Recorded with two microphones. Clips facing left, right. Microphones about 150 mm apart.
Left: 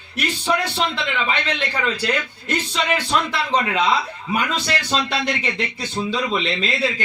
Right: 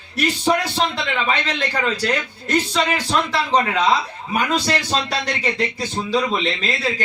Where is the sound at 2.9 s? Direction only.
35° right (ahead or behind).